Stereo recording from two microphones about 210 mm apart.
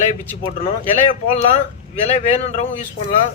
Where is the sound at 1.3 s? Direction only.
30° left (ahead or behind).